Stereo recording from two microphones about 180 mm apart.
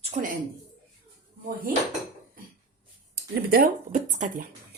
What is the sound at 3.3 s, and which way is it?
Speech, 55° right (ahead or behind).